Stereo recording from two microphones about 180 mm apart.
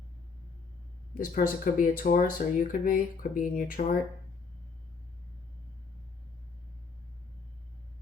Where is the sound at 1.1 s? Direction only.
50° left (ahead or behind).